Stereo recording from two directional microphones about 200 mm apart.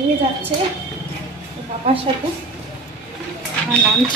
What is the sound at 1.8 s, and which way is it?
Speech, 30° right (ahead or behind).